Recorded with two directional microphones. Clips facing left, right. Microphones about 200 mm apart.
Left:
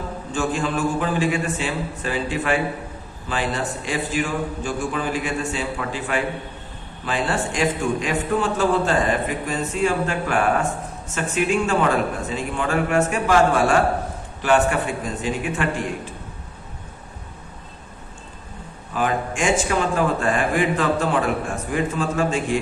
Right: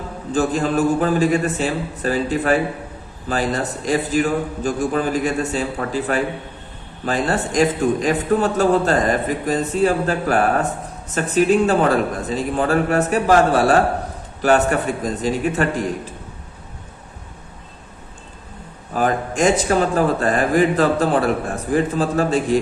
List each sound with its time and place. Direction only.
0.3 s a man's voice: 40° right (ahead or behind)
18.9 s a man's voice: 40° right (ahead or behind)